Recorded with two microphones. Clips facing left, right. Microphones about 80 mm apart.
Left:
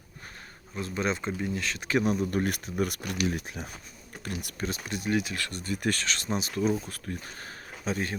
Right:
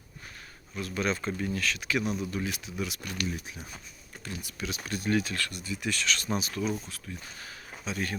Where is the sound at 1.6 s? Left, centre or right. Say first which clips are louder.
Left 5 dB; left.